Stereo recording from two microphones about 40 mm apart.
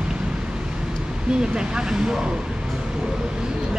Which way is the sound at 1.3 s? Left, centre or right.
Centre.